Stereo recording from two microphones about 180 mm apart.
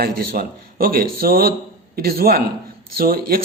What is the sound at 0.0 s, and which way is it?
Speech, 55° right (ahead or behind).